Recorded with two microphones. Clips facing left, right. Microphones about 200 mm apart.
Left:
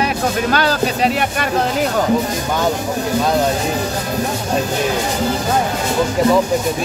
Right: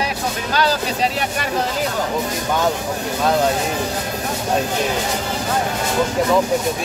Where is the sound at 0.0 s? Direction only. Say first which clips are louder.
Left 6 dB; 60° left (ahead or behind).